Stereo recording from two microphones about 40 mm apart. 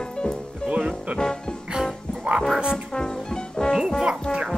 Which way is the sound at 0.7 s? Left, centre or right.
Right.